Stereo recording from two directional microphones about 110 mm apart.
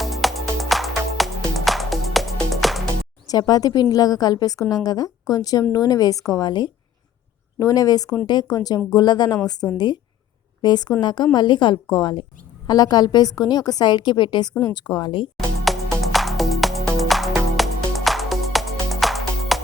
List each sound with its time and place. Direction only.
0.0 s music: centre (ahead or behind)
3.2 s a woman's voice: 35° left (ahead or behind)
15.4 s music: centre (ahead or behind)